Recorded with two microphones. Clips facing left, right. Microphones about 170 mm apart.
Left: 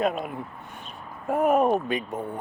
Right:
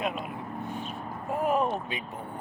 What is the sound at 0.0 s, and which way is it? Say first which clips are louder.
Speech: left 6 dB; 45° left (ahead or behind).